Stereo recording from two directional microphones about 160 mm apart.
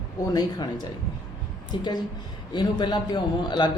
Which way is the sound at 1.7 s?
30° left (ahead or behind).